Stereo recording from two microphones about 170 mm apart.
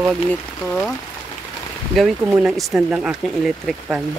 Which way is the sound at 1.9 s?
5° right (ahead or behind).